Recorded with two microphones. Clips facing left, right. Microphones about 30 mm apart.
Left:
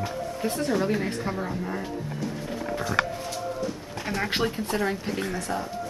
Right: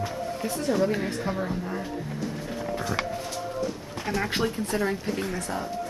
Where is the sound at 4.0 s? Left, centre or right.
Centre.